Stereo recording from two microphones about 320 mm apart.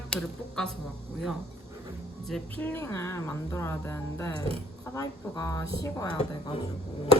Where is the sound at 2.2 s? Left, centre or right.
Centre.